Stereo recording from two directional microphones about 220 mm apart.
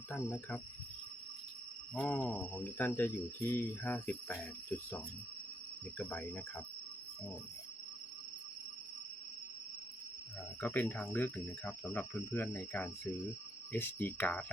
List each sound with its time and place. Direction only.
0.1 s speech: 10° left (ahead or behind)
2.0 s speech: centre (ahead or behind)
6.0 s speech: 5° left (ahead or behind)
10.6 s speech: 10° left (ahead or behind)